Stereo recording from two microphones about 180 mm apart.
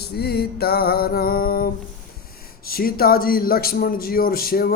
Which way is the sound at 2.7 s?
55° left (ahead or behind).